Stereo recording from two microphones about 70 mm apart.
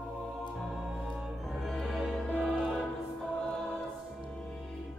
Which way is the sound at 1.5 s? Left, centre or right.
Centre.